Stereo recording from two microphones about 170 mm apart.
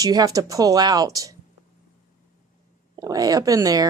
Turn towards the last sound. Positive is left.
turn(degrees=-20)  # may be behind; listen again after turning